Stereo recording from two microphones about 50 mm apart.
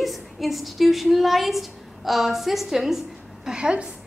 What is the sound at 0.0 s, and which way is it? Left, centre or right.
A woman's voice, centre.